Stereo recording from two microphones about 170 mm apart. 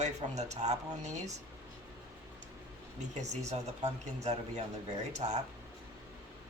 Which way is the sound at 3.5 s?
40° right (ahead or behind).